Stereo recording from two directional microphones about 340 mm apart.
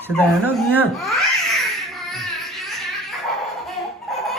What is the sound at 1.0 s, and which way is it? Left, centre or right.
Baby laughter, centre.